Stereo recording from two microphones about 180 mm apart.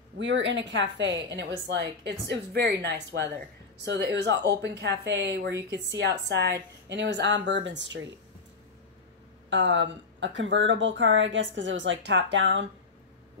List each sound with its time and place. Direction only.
0.2 s a woman's voice: 90° right
9.5 s a woman's voice: 90° right